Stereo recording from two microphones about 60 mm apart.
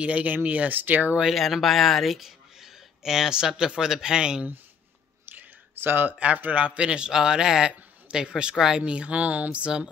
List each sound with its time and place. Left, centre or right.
0.0 s speech: right
1.3 s speech: centre
5.3 s a sound: right
6.1 s speech: right